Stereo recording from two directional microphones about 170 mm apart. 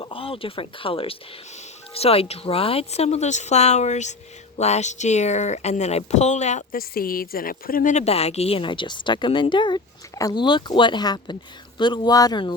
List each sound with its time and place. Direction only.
0.0 s speech: 30° left (ahead or behind)